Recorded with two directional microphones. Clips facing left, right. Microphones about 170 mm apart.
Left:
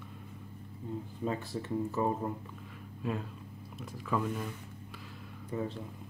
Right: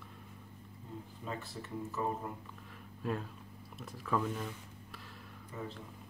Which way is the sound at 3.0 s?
Centre (ahead or behind).